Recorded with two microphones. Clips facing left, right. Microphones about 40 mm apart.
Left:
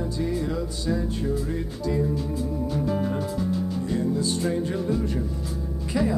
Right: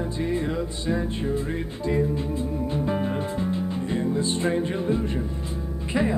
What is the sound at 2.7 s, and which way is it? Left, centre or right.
Music, right.